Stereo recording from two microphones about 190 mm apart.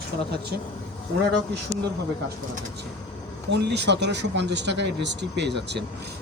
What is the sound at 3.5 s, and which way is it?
Speech, 65° right (ahead or behind).